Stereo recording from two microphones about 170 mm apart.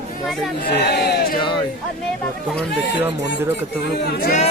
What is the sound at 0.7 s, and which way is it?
Speech, 70° left (ahead or behind).